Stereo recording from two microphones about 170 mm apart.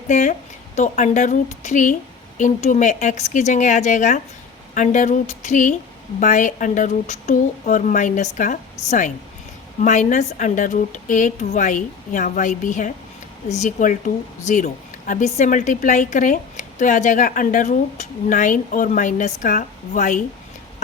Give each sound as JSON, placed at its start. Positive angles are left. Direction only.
{"t": 0.1, "sound": "a woman's voice", "side_deg": 45}